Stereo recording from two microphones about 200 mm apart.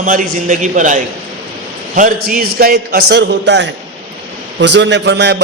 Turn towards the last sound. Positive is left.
turn(degrees=-60)  # may be behind; listen again after turning